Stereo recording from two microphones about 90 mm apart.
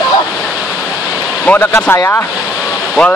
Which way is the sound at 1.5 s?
25° left (ahead or behind).